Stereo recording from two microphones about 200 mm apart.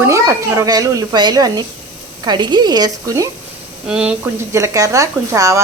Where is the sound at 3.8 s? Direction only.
5° right (ahead or behind).